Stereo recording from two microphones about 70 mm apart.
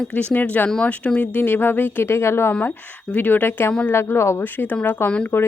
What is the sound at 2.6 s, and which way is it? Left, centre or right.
A woman's voice, left.